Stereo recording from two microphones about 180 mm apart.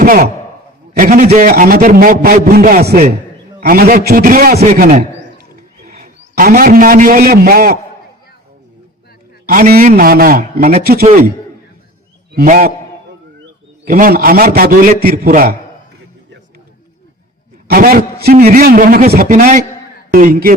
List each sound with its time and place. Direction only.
0.0 s a man's voice: 50° right (ahead or behind)
9.5 s a man's voice: 55° right (ahead or behind)
12.3 s a man's voice: 55° right (ahead or behind)
13.8 s a man's voice: 55° right (ahead or behind)
17.7 s a man's voice: 55° right (ahead or behind)
19.3 s a man's voice: 45° right (ahead or behind)